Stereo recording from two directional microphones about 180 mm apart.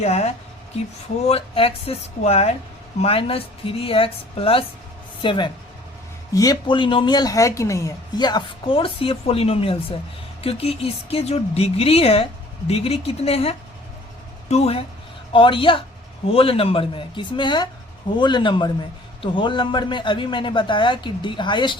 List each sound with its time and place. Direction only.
0.0 s speech: 35° left (ahead or behind)